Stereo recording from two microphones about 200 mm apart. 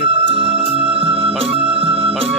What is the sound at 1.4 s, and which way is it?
Organ, 30° right (ahead or behind).